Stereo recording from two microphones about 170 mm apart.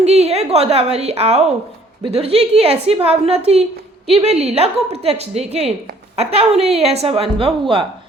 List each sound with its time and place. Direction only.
0.0 s a woman's voice: 40° right (ahead or behind)